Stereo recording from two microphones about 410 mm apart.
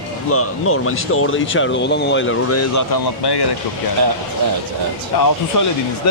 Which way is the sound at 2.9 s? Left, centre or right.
Left.